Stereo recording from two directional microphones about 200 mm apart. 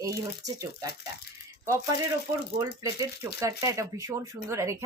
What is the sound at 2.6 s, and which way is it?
Speech, 15° right (ahead or behind).